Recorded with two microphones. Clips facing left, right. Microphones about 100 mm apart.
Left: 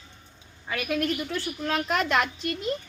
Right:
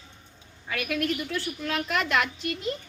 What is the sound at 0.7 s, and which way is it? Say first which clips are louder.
A woman's voice: left 1 dB; 30° left (ahead or behind).